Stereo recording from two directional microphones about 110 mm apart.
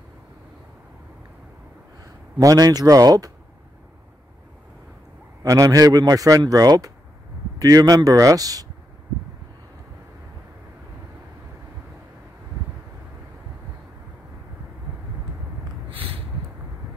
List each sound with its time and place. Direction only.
2.3 s a man's voice: 35° right (ahead or behind)
5.4 s a man's voice: 30° right (ahead or behind)
15.9 s a sound: 55° right (ahead or behind)